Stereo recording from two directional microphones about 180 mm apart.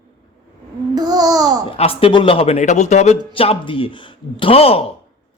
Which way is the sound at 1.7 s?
30° left (ahead or behind).